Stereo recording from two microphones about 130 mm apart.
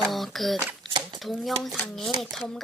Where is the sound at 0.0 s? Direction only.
Centre (ahead or behind).